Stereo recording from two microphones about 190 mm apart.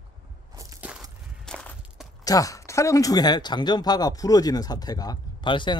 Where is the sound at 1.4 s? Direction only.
5° left (ahead or behind).